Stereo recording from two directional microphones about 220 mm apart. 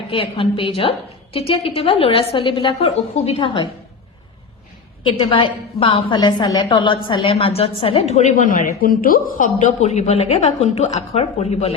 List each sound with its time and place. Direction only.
0.1 s a woman's voice: 25° left (ahead or behind)
5.0 s a woman's voice: 20° left (ahead or behind)